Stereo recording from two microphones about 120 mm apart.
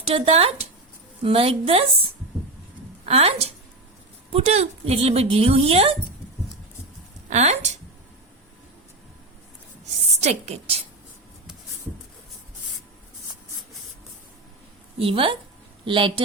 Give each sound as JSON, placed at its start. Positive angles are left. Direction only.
{"t": 0.0, "sound": "speech", "side_deg": -55}
{"t": 3.1, "sound": "a woman's voice", "side_deg": -60}
{"t": 7.3, "sound": "speech", "side_deg": -70}
{"t": 10.1, "sound": "a woman's voice", "side_deg": -65}
{"t": 14.9, "sound": "speech", "side_deg": -50}